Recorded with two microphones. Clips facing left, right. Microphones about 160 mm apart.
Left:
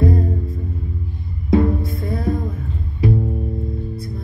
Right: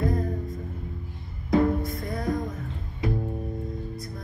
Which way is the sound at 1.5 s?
30° left (ahead or behind).